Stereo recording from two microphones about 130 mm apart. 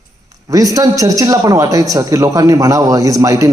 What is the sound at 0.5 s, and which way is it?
A man's voice, 25° right (ahead or behind).